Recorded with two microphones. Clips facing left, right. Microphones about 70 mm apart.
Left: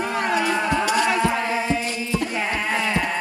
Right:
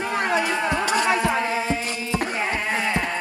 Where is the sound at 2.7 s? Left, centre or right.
Centre.